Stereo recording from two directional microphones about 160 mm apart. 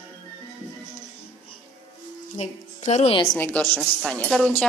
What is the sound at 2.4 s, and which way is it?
Speech, 45° left (ahead or behind).